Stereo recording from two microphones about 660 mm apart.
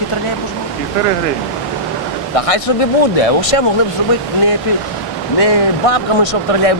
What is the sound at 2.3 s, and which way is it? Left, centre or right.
Speech, left.